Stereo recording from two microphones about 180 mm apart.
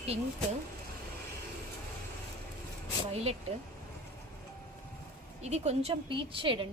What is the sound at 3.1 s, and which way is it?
Speech, 35° right (ahead or behind).